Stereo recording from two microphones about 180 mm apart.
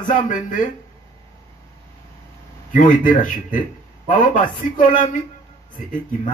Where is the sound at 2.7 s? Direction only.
45° left (ahead or behind).